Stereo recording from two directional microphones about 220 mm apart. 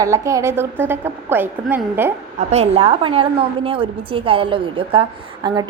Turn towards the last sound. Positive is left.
turn(degrees=-20)  # may be behind; listen again after turning